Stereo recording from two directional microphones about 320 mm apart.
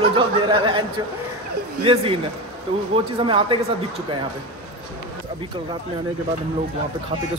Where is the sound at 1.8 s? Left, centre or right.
Centre.